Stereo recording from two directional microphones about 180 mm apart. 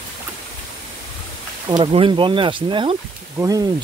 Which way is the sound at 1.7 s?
25° right (ahead or behind).